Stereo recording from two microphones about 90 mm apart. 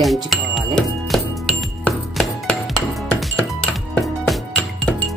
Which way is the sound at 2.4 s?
Centre (ahead or behind).